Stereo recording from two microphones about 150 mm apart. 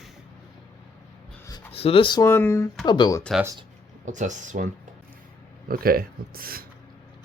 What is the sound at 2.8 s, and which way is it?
Speech, 30° left (ahead or behind).